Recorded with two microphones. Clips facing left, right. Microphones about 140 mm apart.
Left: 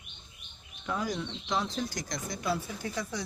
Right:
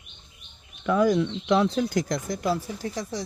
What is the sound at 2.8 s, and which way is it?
Speech, 35° right (ahead or behind).